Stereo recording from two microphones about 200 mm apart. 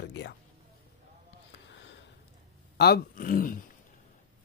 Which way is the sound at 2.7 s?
50° left (ahead or behind).